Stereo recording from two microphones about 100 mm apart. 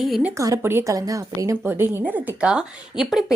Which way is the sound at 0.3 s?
30° right (ahead or behind).